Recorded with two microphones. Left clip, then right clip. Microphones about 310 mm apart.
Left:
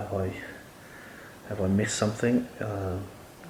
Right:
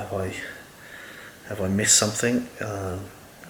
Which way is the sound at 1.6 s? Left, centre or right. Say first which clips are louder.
Right 6 dB; centre.